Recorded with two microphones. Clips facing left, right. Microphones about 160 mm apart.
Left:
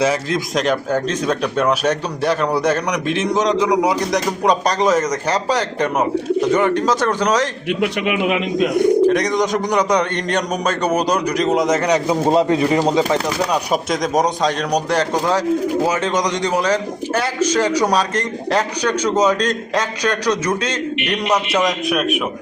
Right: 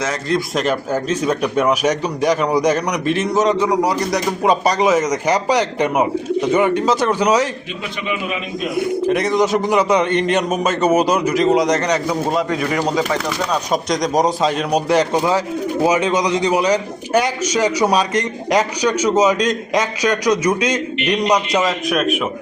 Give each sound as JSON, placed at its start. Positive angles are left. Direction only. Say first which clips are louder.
{"t": 0.0, "sound": "a man's voice", "louder": "left 2 dB", "side_deg": 5}
{"t": 7.8, "sound": "a man's voice", "louder": "left 6 dB", "side_deg": 70}
{"t": 8.7, "sound": "speech", "louder": "left 3 dB", "side_deg": -5}
{"t": 12.0, "sound": "speech", "louder": "left 4 dB", "side_deg": 25}
{"t": 13.5, "sound": "a man's voice", "louder": "even", "side_deg": 5}
{"t": 21.8, "sound": "speech", "louder": "right 1 dB", "side_deg": 0}